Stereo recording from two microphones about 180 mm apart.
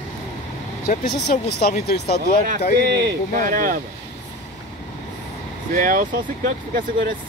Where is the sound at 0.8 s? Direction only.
55° left (ahead or behind).